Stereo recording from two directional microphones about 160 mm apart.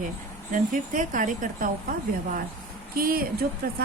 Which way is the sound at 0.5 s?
55° right (ahead or behind).